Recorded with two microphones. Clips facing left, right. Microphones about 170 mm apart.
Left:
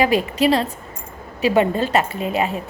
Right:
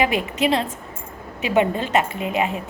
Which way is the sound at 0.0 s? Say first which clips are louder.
Left 3 dB; 35° left (ahead or behind).